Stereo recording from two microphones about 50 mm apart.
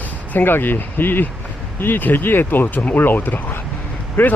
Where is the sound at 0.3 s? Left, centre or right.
Left.